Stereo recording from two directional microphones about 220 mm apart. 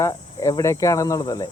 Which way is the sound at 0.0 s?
15° left (ahead or behind).